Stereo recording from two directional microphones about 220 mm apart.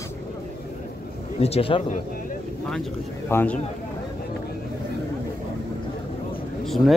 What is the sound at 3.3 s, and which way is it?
Speech, 5° left (ahead or behind).